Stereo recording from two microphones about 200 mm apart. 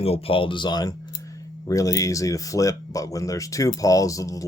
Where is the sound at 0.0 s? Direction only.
30° left (ahead or behind).